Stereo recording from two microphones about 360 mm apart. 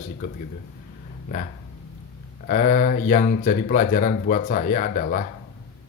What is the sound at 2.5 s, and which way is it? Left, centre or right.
Speech, left.